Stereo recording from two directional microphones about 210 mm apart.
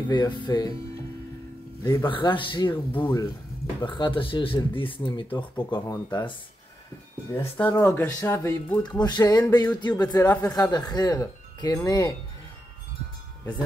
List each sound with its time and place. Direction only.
0.1 s speech: 20° left (ahead or behind)
1.8 s speech: 20° left (ahead or behind)
7.5 s speech: 10° left (ahead or behind)